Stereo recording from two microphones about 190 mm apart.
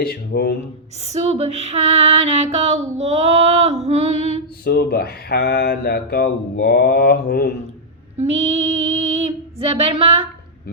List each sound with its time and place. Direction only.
0.0 s speech: 55° left (ahead or behind)
1.0 s female singing: 35° right (ahead or behind)
4.6 s speech: 55° left (ahead or behind)
8.2 s female singing: 35° right (ahead or behind)